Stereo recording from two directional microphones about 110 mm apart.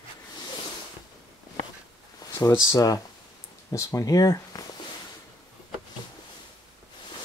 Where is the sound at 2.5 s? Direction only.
30° left (ahead or behind).